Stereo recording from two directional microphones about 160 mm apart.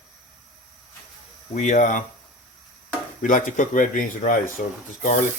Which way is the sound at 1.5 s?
50° left (ahead or behind).